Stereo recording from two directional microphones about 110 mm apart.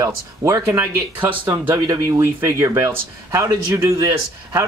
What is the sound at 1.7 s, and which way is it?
Speech, 30° right (ahead or behind).